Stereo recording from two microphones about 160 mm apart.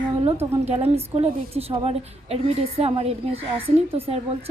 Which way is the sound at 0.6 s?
40° right (ahead or behind).